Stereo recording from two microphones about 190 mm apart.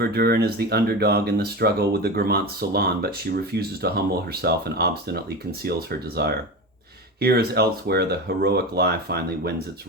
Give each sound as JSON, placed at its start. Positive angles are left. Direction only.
{"t": 0.0, "sound": "speech", "side_deg": -55}